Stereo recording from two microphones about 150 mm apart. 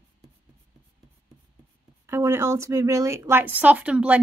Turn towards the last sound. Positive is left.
turn(degrees=-5)  # may be behind; listen again after turning